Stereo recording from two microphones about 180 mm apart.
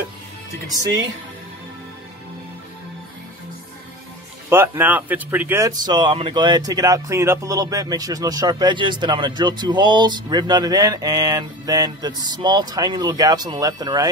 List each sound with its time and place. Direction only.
0.8 s speech: 75° right (ahead or behind)
4.5 s speech: 10° right (ahead or behind)